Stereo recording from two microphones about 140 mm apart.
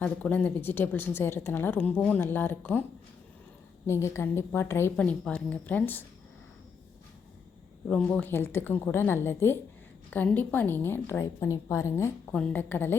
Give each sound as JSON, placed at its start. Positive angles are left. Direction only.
{"t": 0.0, "sound": "a woman's voice", "side_deg": 10}
{"t": 3.8, "sound": "a woman's voice", "side_deg": 20}
{"t": 7.9, "sound": "a woman's voice", "side_deg": 10}